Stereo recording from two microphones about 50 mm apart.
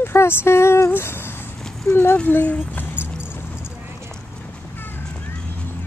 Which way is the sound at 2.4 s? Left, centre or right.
Left.